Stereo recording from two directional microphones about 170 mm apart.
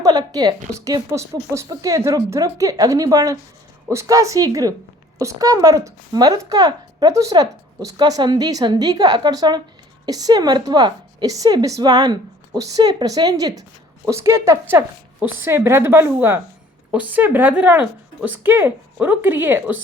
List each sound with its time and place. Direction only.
0.0 s a woman's voice: 20° right (ahead or behind)